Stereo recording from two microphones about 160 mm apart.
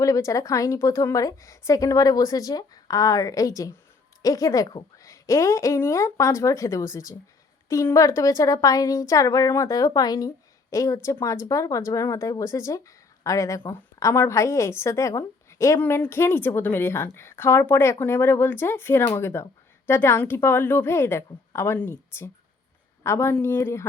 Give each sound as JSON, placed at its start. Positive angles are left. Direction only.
{"t": 0.0, "sound": "a woman's voice", "side_deg": 20}